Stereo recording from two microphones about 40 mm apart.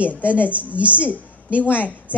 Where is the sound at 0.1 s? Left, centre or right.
Left.